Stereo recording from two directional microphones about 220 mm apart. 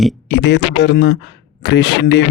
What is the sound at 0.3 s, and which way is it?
Speech, 50° left (ahead or behind).